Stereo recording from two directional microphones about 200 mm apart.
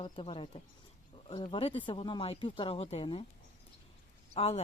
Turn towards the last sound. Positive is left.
turn(degrees=30)  # may be behind; listen again after turning